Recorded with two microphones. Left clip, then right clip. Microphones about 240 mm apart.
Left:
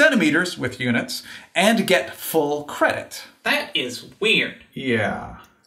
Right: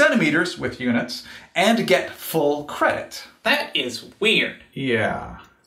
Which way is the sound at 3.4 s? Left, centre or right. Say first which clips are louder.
Right 1 dB; right.